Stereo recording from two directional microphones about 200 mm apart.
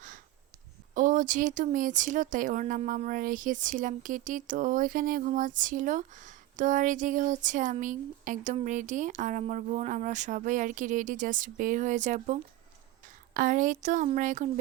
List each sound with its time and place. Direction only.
0.9 s speech: 40° right (ahead or behind)